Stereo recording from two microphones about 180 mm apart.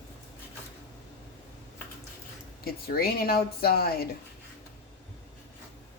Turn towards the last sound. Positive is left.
turn(degrees=60)  # may be behind; listen again after turning